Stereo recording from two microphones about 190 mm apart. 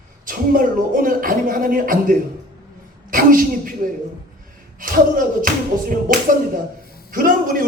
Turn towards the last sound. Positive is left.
turn(degrees=-45)  # may be behind; listen again after turning